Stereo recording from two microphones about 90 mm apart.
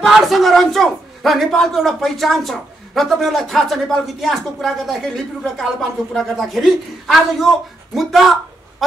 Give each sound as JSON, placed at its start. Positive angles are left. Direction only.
{"t": 0.0, "sound": "a man's voice", "side_deg": 0}